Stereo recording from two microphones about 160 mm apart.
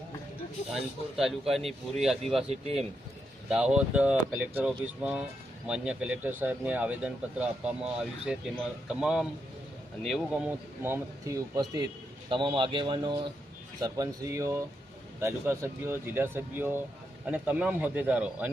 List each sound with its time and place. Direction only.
0.7 s speech: centre (ahead or behind)
3.5 s speech: 5° right (ahead or behind)
12.3 s a man's voice: 30° right (ahead or behind); by 18.5 s 10° right (ahead or behind)